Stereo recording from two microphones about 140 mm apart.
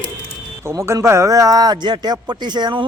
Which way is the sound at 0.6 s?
20° right (ahead or behind).